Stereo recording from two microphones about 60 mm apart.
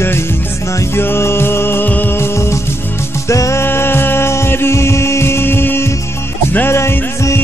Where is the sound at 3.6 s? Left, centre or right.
Left.